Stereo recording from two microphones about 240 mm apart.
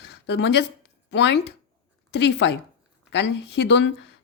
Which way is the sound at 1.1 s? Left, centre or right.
Left.